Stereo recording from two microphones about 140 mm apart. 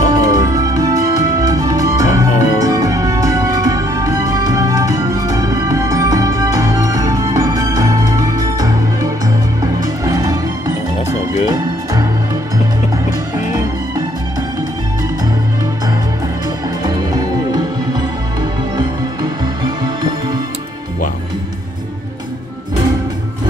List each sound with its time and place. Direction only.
0.1 s music: 25° right (ahead or behind)
11.4 s music: 25° right (ahead or behind)
16.8 s music: 30° right (ahead or behind)